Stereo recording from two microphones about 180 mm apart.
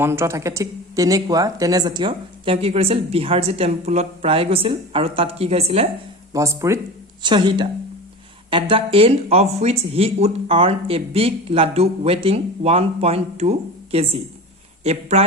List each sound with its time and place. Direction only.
0.0 s speech: 15° right (ahead or behind); by 5.9 s 35° right (ahead or behind)
6.3 s speech: 15° right (ahead or behind); by 15.0 s 35° right (ahead or behind)